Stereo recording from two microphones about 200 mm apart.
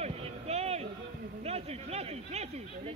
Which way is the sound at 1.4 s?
30° right (ahead or behind).